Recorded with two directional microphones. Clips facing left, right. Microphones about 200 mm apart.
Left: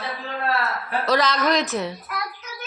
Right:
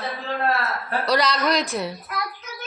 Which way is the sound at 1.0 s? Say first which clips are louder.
Left 1 dB; centre (ahead or behind).